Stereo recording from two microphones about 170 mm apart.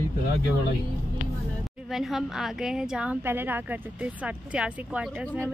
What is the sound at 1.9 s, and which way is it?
A woman's voice, centre (ahead or behind).